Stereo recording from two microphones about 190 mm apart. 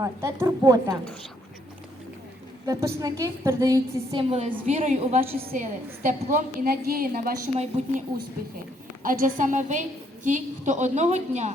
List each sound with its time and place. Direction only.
0.0 s a woman's voice: 15° right (ahead or behind)
2.6 s a woman's voice: 15° right (ahead or behind)
4.1 s a woman's voice: 30° right (ahead or behind); by 7.3 s 50° right (ahead or behind)
7.8 s a woman's voice: 35° right (ahead or behind)
9.0 s a woman's voice: 45° right (ahead or behind)